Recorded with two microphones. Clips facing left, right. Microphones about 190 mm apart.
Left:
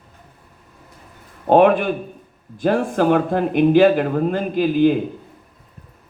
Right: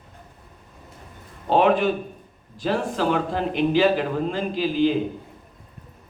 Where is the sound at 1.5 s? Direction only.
55° left (ahead or behind).